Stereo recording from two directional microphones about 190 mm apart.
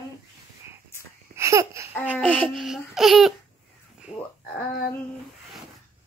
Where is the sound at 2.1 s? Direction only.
Centre (ahead or behind).